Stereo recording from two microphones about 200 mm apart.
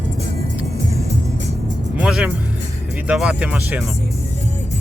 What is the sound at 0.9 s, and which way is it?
Music, 30° right (ahead or behind).